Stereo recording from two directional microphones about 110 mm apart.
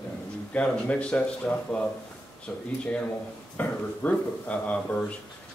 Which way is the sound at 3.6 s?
10° left (ahead or behind).